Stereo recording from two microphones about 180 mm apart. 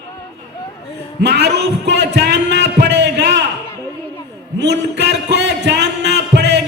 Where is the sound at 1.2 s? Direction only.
70° right (ahead or behind).